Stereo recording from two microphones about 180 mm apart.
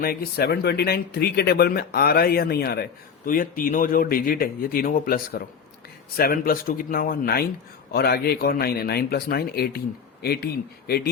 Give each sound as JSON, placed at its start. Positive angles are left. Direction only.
{"t": 0.0, "sound": "speech", "side_deg": 55}